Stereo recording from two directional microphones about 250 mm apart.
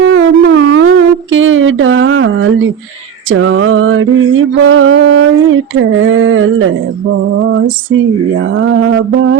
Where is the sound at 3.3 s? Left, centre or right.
Right.